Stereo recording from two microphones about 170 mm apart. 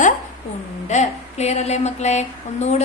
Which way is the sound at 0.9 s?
40° left (ahead or behind).